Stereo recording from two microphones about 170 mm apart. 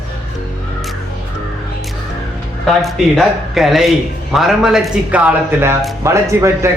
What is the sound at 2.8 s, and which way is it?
A man's voice, centre (ahead or behind).